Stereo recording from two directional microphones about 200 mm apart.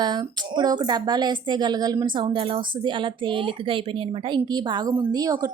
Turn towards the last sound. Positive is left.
turn(degrees=-20)  # may be behind; listen again after turning